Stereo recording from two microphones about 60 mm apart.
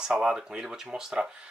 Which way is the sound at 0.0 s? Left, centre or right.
Centre.